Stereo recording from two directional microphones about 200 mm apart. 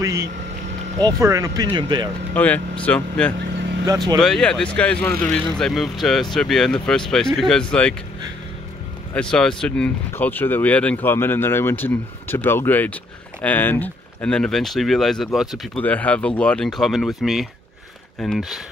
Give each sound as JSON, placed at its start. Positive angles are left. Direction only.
{"t": 0.0, "sound": "speech", "side_deg": -15}
{"t": 2.3, "sound": "speech", "side_deg": 5}
{"t": 9.1, "sound": "speech", "side_deg": 5}